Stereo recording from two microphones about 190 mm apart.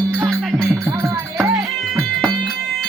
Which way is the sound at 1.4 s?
Centre (ahead or behind).